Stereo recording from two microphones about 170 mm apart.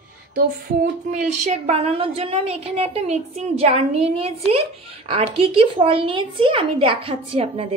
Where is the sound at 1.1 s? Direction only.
45° right (ahead or behind).